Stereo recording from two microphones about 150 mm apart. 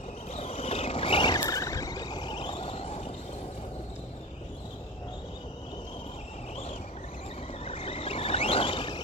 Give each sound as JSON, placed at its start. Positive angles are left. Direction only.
{"t": 0.3, "sound": "vehicle", "side_deg": 45}
{"t": 1.4, "sound": "a sound", "side_deg": 20}
{"t": 7.6, "sound": "vehicle", "side_deg": 40}